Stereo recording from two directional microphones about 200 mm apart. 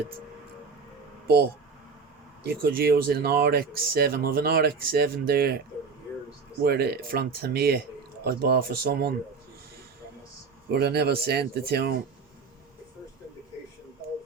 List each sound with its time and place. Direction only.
2.5 s speech: 50° right (ahead or behind)
10.7 s speech: 55° right (ahead or behind)